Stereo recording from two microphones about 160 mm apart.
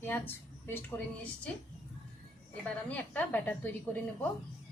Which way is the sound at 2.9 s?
10° left (ahead or behind).